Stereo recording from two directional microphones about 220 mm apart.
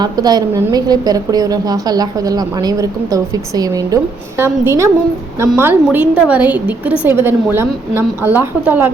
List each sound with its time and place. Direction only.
0.0 s a woman's voice: 20° right (ahead or behind)